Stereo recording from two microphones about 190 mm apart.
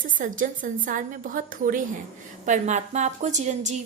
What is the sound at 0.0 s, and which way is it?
A woman's voice, 45° right (ahead or behind).